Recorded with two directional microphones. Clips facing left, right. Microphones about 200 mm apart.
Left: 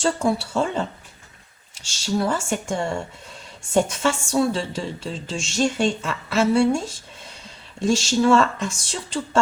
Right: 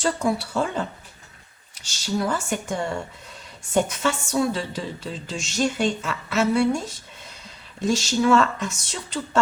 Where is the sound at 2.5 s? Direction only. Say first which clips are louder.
Left 2 dB; 25° left (ahead or behind).